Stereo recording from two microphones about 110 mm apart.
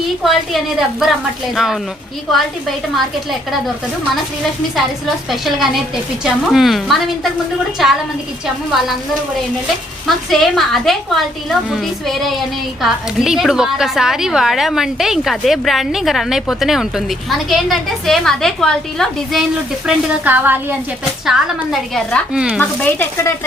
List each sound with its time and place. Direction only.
0.2 s a woman's voice: centre (ahead or behind)
5.3 s a woman's voice: centre (ahead or behind)
10.1 s a woman's voice: centre (ahead or behind)
20.2 s a woman's voice: 15° right (ahead or behind)
21.2 s a woman's voice: 5° right (ahead or behind)
22.6 s speech: 15° left (ahead or behind)